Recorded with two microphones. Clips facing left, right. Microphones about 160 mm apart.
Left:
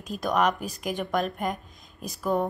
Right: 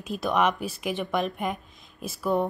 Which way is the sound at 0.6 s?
40° left (ahead or behind).